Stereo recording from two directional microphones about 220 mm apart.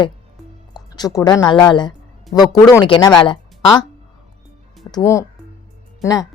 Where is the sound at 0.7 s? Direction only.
20° left (ahead or behind).